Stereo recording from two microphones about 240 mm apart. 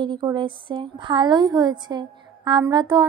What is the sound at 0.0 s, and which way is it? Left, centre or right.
Speech, centre.